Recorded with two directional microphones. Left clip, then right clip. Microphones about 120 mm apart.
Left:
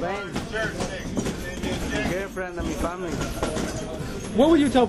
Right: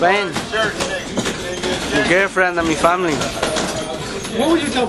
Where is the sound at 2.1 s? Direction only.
25° right (ahead or behind).